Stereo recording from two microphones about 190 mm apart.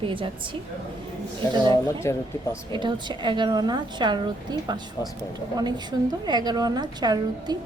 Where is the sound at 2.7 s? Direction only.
25° right (ahead or behind).